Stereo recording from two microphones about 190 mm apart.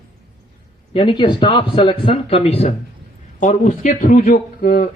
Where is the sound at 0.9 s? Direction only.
25° left (ahead or behind).